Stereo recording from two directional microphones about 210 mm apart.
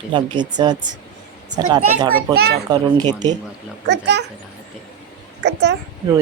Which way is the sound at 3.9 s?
55° right (ahead or behind).